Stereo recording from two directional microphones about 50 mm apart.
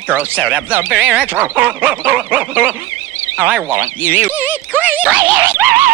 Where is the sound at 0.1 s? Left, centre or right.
Right.